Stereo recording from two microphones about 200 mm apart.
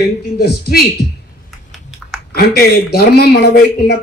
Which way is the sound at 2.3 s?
50° left (ahead or behind).